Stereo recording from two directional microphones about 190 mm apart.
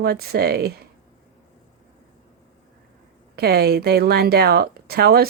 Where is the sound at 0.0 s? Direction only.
55° right (ahead or behind).